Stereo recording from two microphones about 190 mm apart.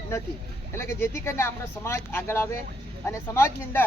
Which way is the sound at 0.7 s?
15° left (ahead or behind).